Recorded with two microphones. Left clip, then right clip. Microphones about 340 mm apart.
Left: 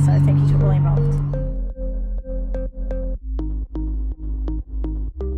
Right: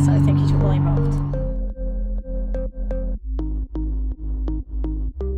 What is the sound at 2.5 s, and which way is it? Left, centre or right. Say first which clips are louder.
Music: right 2 dB; centre.